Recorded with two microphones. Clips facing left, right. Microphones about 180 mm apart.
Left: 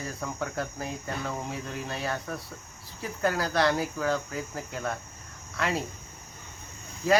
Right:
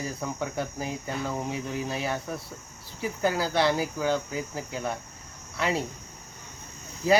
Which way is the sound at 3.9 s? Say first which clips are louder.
Right 2 dB; 5° right (ahead or behind).